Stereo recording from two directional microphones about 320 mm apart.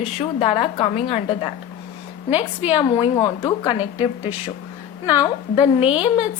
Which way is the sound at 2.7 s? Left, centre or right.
Centre.